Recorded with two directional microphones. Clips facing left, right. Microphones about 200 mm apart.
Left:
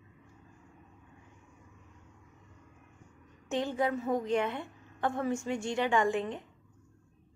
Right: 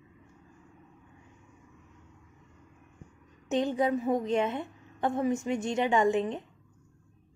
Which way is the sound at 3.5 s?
20° right (ahead or behind).